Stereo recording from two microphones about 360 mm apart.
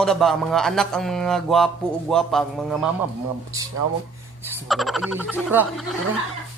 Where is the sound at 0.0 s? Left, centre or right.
Centre.